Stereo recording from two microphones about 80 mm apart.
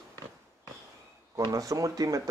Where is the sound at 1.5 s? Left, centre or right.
Right.